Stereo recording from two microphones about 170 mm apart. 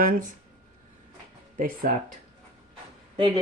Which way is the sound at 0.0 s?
50° right (ahead or behind).